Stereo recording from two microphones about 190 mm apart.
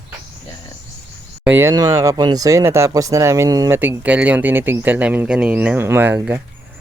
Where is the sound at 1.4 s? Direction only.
10° right (ahead or behind).